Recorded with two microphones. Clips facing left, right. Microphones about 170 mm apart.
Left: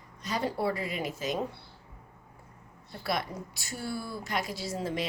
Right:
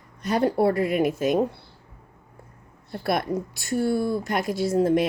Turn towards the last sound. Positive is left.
turn(degrees=-55)  # may be behind; listen again after turning